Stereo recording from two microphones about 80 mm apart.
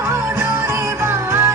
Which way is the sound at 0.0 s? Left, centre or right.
Right.